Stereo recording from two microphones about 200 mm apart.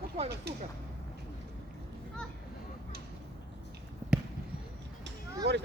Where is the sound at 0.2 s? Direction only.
30° right (ahead or behind).